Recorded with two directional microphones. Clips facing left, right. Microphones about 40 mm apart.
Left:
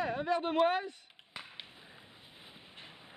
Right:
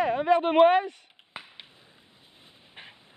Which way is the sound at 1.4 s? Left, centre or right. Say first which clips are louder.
Right 4 dB; centre.